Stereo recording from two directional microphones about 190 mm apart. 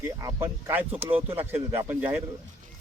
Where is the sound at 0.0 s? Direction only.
15° right (ahead or behind).